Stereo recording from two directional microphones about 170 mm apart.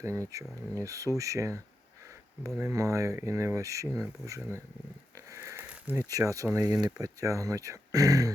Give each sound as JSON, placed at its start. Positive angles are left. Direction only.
{"t": 0.0, "sound": "speech", "side_deg": -15}
{"t": 5.1, "sound": "a sound", "side_deg": -15}
{"t": 7.0, "sound": "speech", "side_deg": -20}